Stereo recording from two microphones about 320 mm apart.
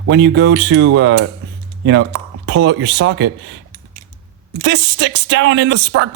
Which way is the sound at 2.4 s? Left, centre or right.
Right.